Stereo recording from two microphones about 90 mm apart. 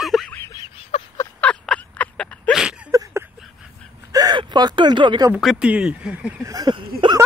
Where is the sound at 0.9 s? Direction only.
90° left.